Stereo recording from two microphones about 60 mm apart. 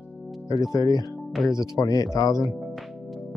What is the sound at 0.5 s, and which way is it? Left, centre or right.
Speech, left.